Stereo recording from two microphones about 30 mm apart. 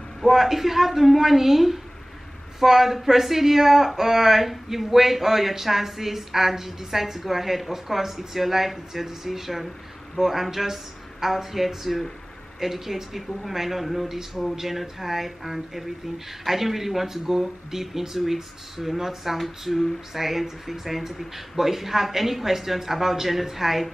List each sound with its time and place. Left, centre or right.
0.3 s speech: centre